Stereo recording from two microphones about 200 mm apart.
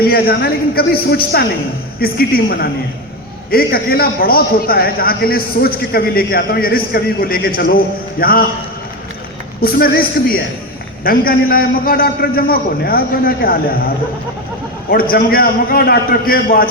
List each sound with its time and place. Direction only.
0.0 s a man's voice: 50° left (ahead or behind)
9.6 s a man's voice: 50° left (ahead or behind)
14.8 s a man's voice: 45° left (ahead or behind)